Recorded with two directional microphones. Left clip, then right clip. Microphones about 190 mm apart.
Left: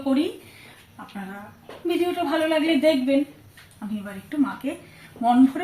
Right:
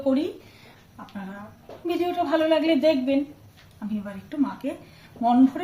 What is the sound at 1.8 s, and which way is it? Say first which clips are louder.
A woman's voice: left 1 dB; 35° right (ahead or behind).